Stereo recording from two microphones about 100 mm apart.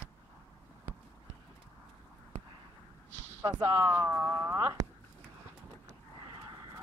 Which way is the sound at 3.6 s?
35° right (ahead or behind).